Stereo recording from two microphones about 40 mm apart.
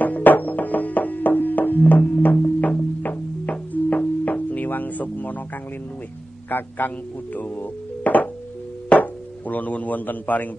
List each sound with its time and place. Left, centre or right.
0.0 s music: left
6.5 s a man's voice: left
7.3 s music: left
8.8 s speech: left